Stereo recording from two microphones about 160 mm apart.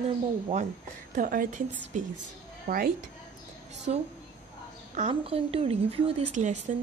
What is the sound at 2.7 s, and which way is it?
Speech, 55° right (ahead or behind).